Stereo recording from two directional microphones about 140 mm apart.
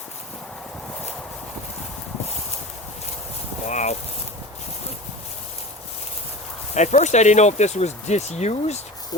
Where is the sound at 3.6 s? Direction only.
55° left (ahead or behind).